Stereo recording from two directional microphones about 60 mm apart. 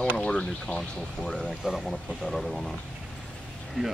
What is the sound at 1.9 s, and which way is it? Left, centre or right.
Speech, centre.